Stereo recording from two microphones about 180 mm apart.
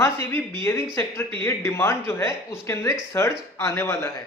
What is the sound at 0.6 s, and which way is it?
Speech, 15° left (ahead or behind).